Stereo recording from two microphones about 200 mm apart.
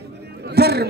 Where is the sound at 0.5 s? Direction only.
55° right (ahead or behind).